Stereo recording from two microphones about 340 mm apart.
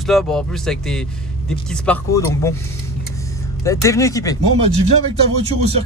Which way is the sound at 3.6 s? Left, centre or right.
Centre.